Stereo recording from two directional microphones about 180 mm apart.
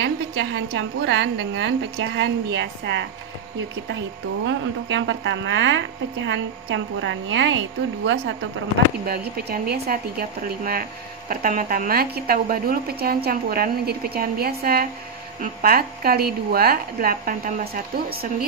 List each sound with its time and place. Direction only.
0.0 s a woman's voice: 75° right (ahead or behind)
4.5 s a woman's voice: 90° right
9.0 s a woman's voice: 60° right (ahead or behind)